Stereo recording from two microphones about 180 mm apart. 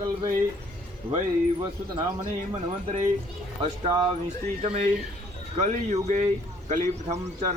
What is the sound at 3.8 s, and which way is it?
Speech, 30° right (ahead or behind).